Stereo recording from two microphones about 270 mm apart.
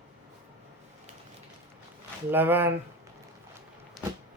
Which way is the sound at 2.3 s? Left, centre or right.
Centre.